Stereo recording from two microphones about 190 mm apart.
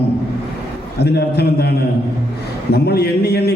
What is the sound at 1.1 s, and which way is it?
Speech, 55° left (ahead or behind).